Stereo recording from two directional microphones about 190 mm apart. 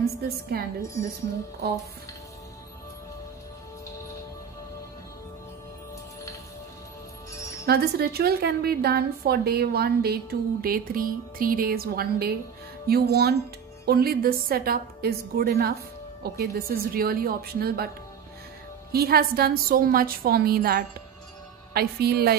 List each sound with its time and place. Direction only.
0.0 s a woman's voice: 55° right (ahead or behind)
7.6 s a woman's voice: 55° right (ahead or behind)
18.9 s a woman's voice: 55° right (ahead or behind)